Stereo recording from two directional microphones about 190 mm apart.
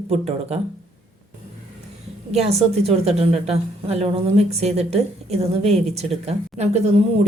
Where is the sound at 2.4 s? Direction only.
35° right (ahead or behind).